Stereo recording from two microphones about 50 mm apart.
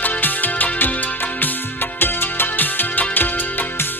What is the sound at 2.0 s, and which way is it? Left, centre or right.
Music, left.